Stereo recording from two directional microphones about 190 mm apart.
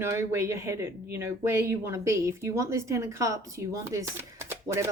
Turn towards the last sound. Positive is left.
turn(degrees=-15)  # may be behind; listen again after turning